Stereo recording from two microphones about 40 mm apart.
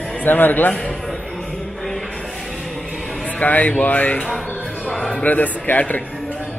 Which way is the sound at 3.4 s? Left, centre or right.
Left.